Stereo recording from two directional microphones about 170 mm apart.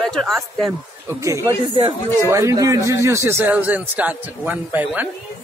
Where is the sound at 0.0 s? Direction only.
Centre (ahead or behind).